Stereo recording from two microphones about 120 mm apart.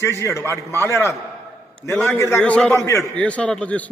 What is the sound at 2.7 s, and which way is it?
Speech, 25° left (ahead or behind).